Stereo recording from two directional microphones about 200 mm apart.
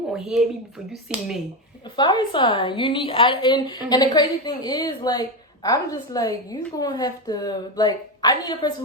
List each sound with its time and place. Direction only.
0.1 s speech: 5° right (ahead or behind)
1.8 s a woman's voice: 20° left (ahead or behind)